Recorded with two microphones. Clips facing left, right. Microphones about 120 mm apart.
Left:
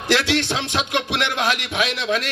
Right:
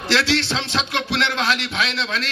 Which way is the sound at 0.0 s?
15° left (ahead or behind).